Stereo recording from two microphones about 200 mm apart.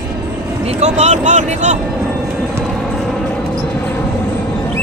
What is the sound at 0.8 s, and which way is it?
Speech, 35° right (ahead or behind).